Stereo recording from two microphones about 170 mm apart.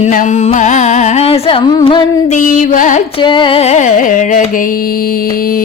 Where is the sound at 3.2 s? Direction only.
30° left (ahead or behind).